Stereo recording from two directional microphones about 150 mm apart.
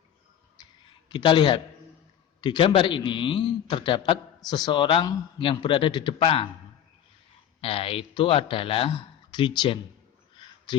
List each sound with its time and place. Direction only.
0.6 s a sound: 30° left (ahead or behind)
2.4 s a man's voice: 30° left (ahead or behind)
7.6 s a man's voice: 40° left (ahead or behind)